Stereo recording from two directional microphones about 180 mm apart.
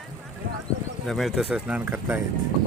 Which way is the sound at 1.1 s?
Centre (ahead or behind).